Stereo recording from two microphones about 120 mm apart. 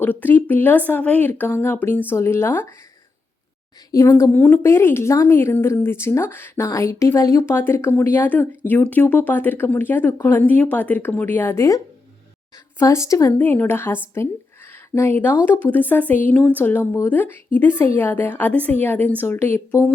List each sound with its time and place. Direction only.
0.0 s speech: 15° left (ahead or behind)
3.9 s a woman's voice: 25° left (ahead or behind)
12.8 s a woman's voice: 25° left (ahead or behind)